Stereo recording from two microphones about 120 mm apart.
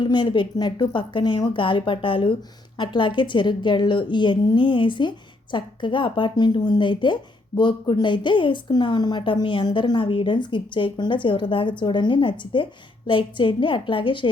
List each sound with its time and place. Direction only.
0.0 s a woman's voice: 40° left (ahead or behind)